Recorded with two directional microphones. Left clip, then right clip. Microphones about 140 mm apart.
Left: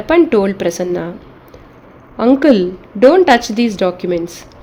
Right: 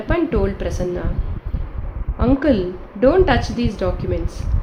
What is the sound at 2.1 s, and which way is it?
Speech, 85° left.